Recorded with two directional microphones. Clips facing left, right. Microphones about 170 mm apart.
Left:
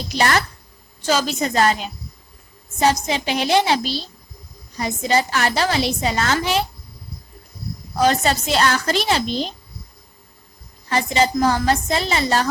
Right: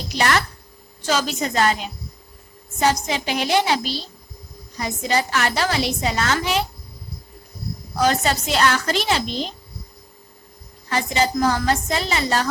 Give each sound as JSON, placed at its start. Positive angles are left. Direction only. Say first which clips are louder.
{"t": 0.2, "sound": "a woman's voice", "louder": "left 1 dB", "side_deg": 35}
{"t": 3.1, "sound": "a woman's voice", "louder": "left 2 dB", "side_deg": 25}
{"t": 8.0, "sound": "a woman's voice", "louder": "left 2 dB", "side_deg": 30}
{"t": 10.8, "sound": "a woman's voice", "louder": "left 2 dB", "side_deg": 30}